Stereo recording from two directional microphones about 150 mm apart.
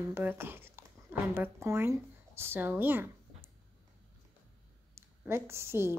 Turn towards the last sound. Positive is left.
turn(degrees=-15)  # may be behind; listen again after turning